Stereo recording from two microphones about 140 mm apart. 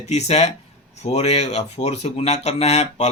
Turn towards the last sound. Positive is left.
turn(degrees=50)  # may be behind; listen again after turning